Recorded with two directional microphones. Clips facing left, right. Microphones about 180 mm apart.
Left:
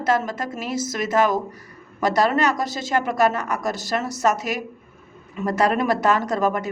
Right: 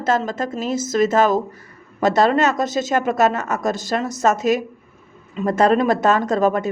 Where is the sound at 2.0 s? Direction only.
25° right (ahead or behind).